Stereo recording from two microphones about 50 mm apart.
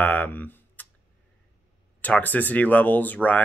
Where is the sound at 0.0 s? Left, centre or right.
Left.